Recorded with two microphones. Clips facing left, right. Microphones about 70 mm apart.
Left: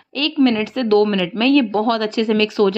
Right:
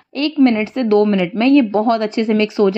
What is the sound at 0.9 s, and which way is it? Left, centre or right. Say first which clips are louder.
A woman's voice: right 2 dB; right.